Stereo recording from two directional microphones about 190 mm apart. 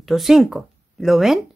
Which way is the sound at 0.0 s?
Centre (ahead or behind).